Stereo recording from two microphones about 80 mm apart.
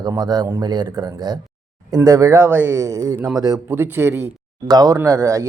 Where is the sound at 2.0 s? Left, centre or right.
Right.